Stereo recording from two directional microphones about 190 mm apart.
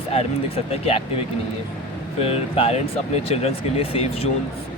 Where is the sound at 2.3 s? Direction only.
30° left (ahead or behind).